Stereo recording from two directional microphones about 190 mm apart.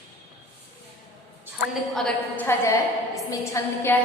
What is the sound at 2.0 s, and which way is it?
A woman's voice, 5° left (ahead or behind).